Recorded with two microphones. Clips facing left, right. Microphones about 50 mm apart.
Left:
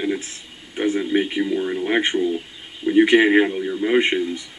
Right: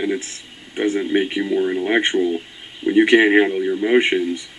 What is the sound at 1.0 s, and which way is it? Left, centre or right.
Speech, right.